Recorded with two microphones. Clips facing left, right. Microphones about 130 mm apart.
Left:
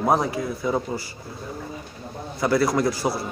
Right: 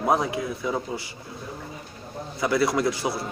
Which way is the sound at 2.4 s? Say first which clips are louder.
Left 2 dB; centre (ahead or behind).